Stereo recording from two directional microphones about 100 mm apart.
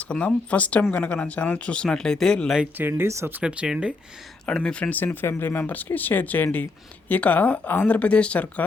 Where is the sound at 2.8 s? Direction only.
20° right (ahead or behind).